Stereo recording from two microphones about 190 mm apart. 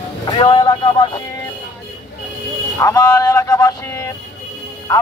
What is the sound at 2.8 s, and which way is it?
Speech, 15° left (ahead or behind).